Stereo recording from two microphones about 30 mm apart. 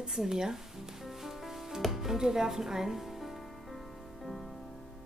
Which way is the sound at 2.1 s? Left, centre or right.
Centre.